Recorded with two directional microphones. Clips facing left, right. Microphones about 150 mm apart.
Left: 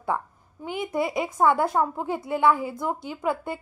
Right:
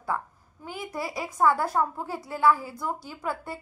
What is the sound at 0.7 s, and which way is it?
A woman's voice, 20° left (ahead or behind).